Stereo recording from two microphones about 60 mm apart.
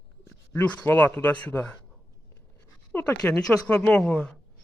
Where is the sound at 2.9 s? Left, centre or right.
Left.